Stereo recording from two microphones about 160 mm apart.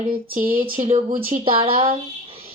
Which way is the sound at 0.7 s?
45° right (ahead or behind).